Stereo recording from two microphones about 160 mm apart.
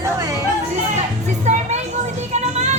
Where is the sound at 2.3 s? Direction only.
45° right (ahead or behind).